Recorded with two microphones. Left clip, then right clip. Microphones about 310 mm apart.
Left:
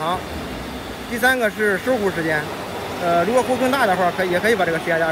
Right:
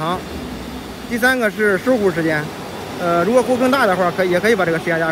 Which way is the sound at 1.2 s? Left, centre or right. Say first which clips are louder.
Right 2 dB; right.